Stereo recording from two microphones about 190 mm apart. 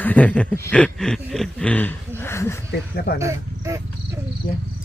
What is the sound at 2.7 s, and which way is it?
Speech, 55° left (ahead or behind).